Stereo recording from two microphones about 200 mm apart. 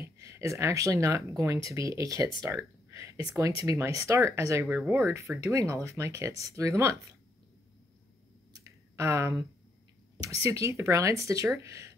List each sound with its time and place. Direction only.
0.0 s speech: 15° right (ahead or behind)
8.5 s a sound: 15° right (ahead or behind)
10.4 s speech: 15° right (ahead or behind)